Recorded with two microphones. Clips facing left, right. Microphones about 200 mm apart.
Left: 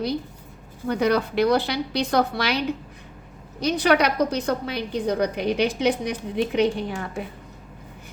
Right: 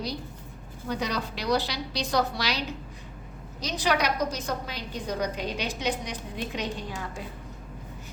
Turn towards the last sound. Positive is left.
turn(degrees=60)  # may be behind; listen again after turning